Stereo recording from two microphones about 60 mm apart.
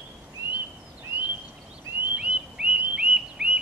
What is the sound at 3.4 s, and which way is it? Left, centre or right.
Chirp, centre.